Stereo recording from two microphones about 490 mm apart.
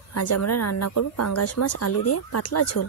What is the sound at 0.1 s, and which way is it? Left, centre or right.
Speech, left.